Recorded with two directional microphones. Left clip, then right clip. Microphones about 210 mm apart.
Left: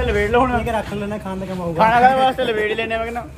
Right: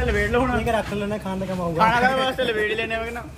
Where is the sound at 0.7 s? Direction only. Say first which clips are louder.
Left 1 dB; 5° left (ahead or behind).